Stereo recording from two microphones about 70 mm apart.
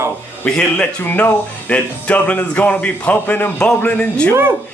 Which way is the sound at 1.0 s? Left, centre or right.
Left.